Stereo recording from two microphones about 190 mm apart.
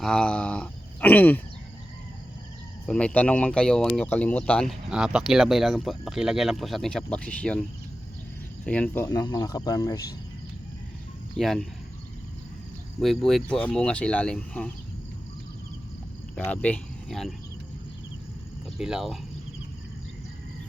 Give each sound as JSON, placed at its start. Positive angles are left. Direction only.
{"t": 0.0, "sound": "speech", "side_deg": 5}
{"t": 2.8, "sound": "speech", "side_deg": 5}
{"t": 8.6, "sound": "speech", "side_deg": 5}
{"t": 11.3, "sound": "speech", "side_deg": 0}
{"t": 13.0, "sound": "speech", "side_deg": 0}
{"t": 16.5, "sound": "speech", "side_deg": 5}
{"t": 18.8, "sound": "speech", "side_deg": 0}